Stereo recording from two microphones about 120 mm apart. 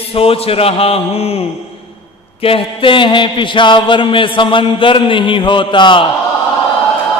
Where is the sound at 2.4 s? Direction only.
50° left (ahead or behind).